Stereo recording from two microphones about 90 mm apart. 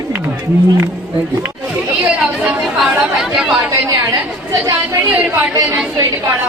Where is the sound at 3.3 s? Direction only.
5° right (ahead or behind).